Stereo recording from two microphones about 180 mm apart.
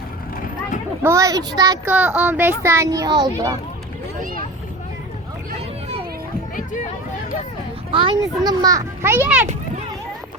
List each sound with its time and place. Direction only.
1.0 s a child's voice: 15° right (ahead or behind)
7.9 s a child's voice: 30° right (ahead or behind); by 9.5 s 10° right (ahead or behind)